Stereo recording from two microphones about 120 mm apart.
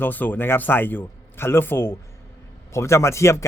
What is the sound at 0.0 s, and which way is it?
Speech, 15° left (ahead or behind).